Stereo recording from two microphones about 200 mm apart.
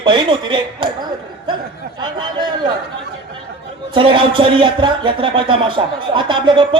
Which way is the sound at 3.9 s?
25° right (ahead or behind).